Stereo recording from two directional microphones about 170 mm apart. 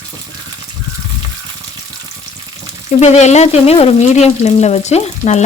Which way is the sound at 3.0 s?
40° left (ahead or behind).